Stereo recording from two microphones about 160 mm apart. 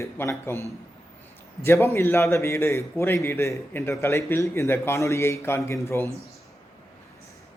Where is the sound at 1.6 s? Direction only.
15° left (ahead or behind).